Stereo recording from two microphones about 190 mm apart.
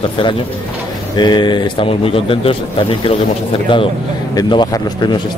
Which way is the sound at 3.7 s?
25° left (ahead or behind).